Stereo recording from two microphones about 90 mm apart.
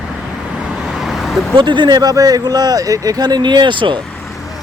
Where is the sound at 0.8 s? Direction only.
Centre (ahead or behind).